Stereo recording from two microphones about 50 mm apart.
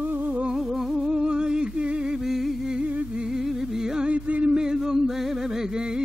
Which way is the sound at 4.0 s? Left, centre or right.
Right.